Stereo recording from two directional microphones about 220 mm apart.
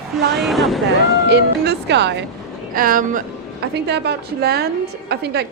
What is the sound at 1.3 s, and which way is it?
Speech, 50° right (ahead or behind).